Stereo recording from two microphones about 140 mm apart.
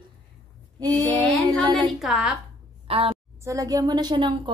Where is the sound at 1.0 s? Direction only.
10° left (ahead or behind).